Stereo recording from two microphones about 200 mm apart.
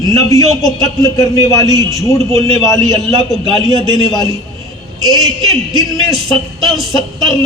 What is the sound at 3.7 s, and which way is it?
Speech, 20° left (ahead or behind).